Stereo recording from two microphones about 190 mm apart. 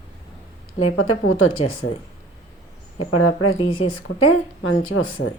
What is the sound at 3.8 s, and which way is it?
Speech, 90° left.